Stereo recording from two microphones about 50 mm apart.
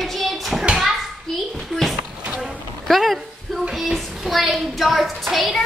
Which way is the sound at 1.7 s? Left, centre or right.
Centre.